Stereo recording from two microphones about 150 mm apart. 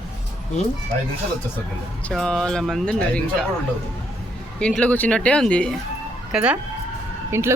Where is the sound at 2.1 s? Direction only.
Centre (ahead or behind).